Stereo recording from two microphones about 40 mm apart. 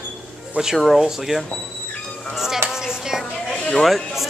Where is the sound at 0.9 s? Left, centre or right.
Centre.